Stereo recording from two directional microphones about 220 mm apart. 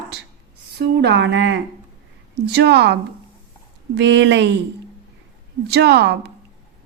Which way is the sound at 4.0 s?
55° right (ahead or behind).